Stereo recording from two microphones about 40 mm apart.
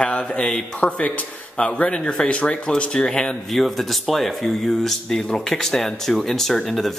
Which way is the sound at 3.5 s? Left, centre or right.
Centre.